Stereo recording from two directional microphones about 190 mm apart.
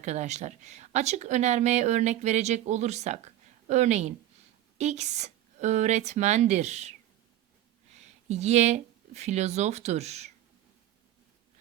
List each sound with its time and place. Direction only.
0.0 s speech: 40° right (ahead or behind)
7.9 s speech: 35° right (ahead or behind)